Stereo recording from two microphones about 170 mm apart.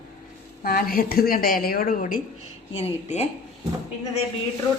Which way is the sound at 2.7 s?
40° left (ahead or behind).